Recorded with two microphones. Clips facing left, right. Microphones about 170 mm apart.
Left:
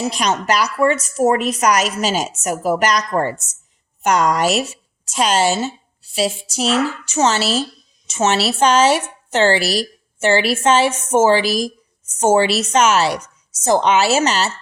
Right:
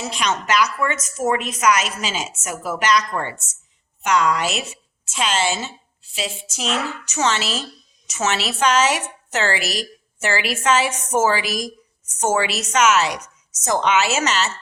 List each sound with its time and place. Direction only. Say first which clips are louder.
0.0 s a woman's voice: left 4 dB; 35° left (ahead or behind)